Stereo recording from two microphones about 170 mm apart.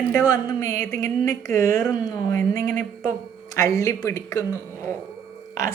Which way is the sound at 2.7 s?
50° right (ahead or behind).